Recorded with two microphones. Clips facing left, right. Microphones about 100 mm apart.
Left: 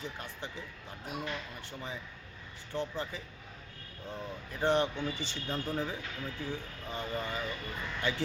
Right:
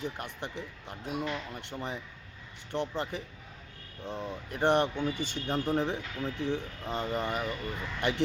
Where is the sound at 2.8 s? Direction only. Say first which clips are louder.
Right 3 dB; 65° right (ahead or behind).